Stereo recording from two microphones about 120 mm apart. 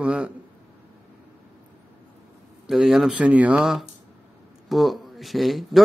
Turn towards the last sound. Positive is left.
turn(degrees=0)  # may be behind; listen again after turning